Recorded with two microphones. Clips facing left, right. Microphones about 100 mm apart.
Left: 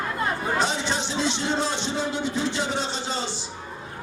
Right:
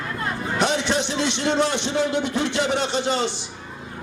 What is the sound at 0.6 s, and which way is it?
A man's voice, 65° right (ahead or behind).